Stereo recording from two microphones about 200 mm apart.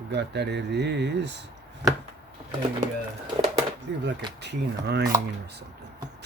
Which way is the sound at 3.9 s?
65° right (ahead or behind).